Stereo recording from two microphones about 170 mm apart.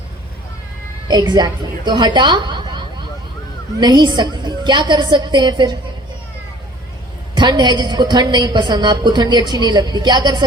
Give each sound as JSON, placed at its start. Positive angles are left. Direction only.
{"t": 1.0, "sound": "a woman's voice", "side_deg": -25}
{"t": 7.3, "sound": "a woman's voice", "side_deg": -25}